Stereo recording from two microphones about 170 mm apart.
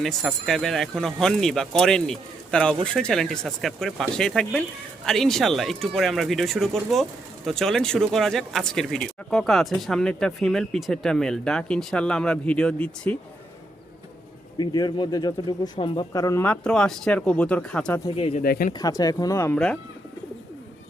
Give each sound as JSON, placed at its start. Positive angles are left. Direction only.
{"t": 0.0, "sound": "speech", "side_deg": 0}
{"t": 14.6, "sound": "speech", "side_deg": 25}
{"t": 18.4, "sound": "speech", "side_deg": 60}
{"t": 18.7, "sound": "speech", "side_deg": 20}
{"t": 19.5, "sound": "speech", "side_deg": 5}